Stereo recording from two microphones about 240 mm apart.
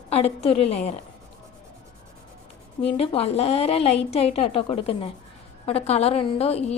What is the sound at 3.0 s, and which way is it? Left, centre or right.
A woman's voice, left.